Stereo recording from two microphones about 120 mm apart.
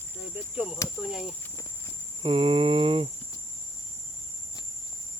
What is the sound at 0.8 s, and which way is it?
Speech, 25° left (ahead or behind).